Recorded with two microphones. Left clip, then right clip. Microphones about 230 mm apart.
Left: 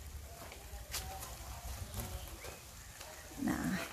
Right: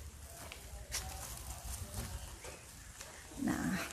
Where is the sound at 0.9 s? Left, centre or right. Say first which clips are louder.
Right 1 dB; centre.